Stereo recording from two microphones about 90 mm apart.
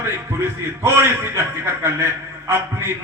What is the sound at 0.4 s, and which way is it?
A man's voice, 30° right (ahead or behind).